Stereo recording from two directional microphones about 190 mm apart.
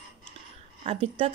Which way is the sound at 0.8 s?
30° right (ahead or behind).